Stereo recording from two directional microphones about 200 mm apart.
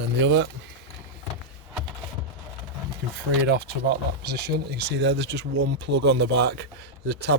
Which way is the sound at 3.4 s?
55° right (ahead or behind).